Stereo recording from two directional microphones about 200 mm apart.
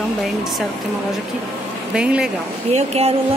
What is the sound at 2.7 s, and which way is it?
Speech, 30° right (ahead or behind).